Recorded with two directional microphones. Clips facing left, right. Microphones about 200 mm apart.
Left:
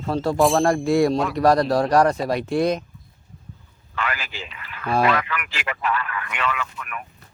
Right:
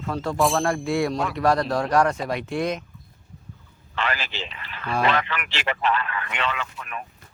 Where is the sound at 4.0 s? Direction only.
30° right (ahead or behind).